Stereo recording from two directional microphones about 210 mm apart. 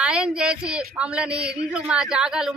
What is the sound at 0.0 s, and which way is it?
A woman's voice, 5° right (ahead or behind).